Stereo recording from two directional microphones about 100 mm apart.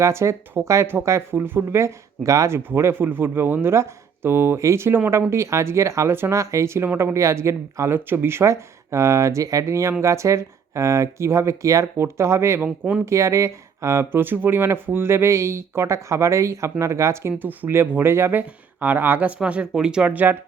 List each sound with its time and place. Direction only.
0.0 s speech: 30° right (ahead or behind)
2.6 s speech: 25° right (ahead or behind)
12.6 s speech: 10° right (ahead or behind)
13.1 s speech: 30° right (ahead or behind)